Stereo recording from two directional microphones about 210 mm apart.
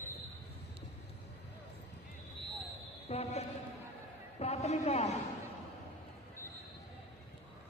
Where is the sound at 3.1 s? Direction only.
30° left (ahead or behind).